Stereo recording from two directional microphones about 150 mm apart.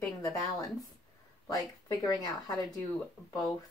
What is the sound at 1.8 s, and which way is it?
Speech, 25° left (ahead or behind).